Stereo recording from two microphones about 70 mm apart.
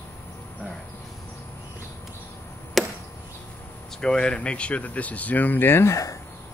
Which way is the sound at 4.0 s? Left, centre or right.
Centre.